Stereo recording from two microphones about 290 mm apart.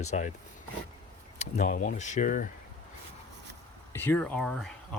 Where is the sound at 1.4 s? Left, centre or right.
Left.